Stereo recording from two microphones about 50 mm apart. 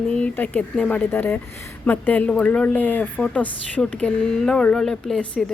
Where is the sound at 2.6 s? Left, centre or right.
Left; by 5.2 s centre.